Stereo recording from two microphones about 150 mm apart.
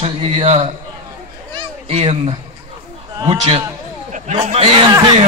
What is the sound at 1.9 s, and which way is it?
A man's voice, 40° right (ahead or behind).